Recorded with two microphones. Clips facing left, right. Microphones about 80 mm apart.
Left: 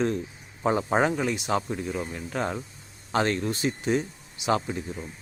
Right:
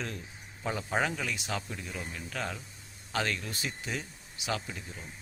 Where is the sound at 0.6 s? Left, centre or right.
Left.